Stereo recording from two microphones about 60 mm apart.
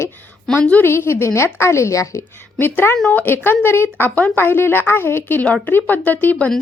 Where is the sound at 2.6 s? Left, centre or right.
Left.